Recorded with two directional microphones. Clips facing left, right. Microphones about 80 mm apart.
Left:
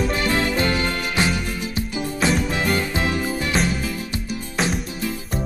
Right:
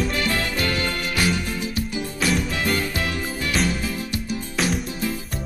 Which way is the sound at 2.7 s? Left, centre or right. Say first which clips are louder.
Left 3 dB; left.